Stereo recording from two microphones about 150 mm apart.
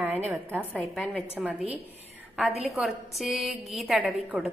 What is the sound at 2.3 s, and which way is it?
A woman's voice, centre (ahead or behind).